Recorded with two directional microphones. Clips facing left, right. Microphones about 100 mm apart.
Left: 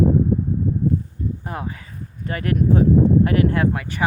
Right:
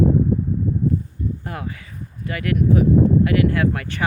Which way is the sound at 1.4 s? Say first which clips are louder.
Left 1 dB; 25° left (ahead or behind).